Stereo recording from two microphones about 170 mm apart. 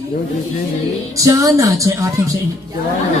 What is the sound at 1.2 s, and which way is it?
A woman's voice, 20° right (ahead or behind).